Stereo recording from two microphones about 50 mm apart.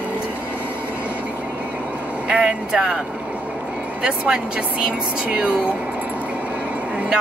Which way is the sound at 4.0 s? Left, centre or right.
Centre.